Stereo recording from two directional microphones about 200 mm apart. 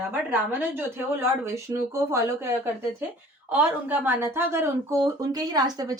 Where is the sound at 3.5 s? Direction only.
10° right (ahead or behind).